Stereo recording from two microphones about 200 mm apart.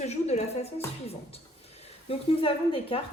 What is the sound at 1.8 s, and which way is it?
A woman's voice, 30° left (ahead or behind).